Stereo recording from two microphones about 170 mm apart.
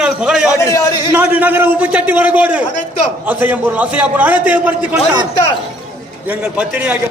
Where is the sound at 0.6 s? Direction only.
20° left (ahead or behind).